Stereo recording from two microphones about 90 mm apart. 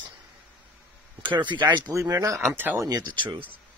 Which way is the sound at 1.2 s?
60° right (ahead or behind).